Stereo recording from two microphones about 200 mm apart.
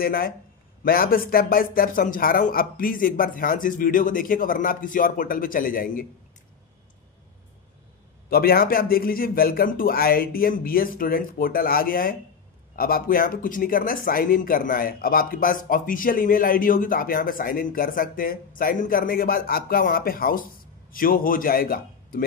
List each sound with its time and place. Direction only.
0.0 s speech: 50° left (ahead or behind)
8.3 s speech: 50° left (ahead or behind)